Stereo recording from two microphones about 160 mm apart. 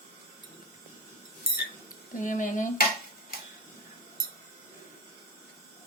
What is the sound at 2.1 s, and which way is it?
Speech, 55° left (ahead or behind).